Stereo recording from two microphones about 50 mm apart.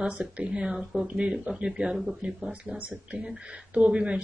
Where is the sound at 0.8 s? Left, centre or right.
Centre.